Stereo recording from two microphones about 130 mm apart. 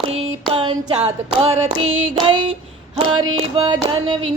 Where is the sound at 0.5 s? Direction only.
50° right (ahead or behind); by 3.8 s 30° right (ahead or behind).